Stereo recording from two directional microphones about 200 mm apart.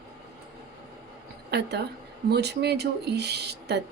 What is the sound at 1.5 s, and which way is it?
A woman's voice, 55° right (ahead or behind).